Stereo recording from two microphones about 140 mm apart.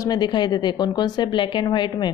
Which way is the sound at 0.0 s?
30° left (ahead or behind).